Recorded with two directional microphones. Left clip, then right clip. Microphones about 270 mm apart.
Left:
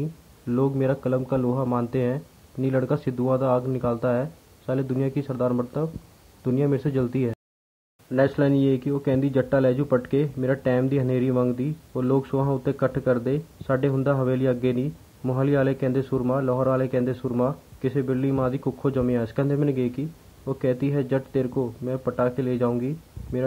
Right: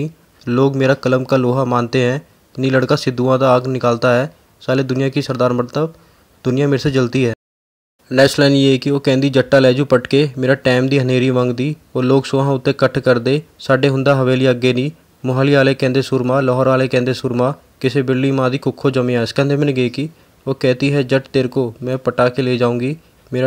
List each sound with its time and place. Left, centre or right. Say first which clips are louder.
0.0 s speech: right 8 dB; right